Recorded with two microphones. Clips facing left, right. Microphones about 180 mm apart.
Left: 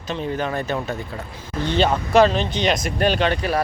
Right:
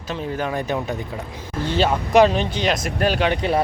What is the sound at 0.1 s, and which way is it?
Speech, 5° right (ahead or behind).